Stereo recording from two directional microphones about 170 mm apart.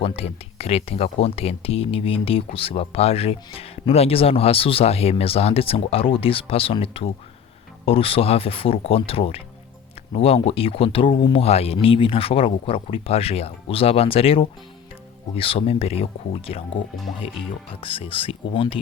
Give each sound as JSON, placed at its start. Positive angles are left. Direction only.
{"t": 0.2, "sound": "speech", "side_deg": 35}
{"t": 17.7, "sound": "speech", "side_deg": 30}